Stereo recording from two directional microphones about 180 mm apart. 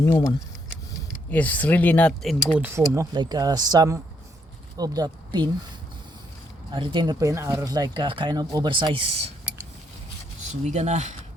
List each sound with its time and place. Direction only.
0.0 s speech: 20° left (ahead or behind)
1.3 s speech: 10° left (ahead or behind)
2.6 s speech: 15° right (ahead or behind)
6.7 s speech: 30° right (ahead or behind)
10.5 s speech: 40° right (ahead or behind)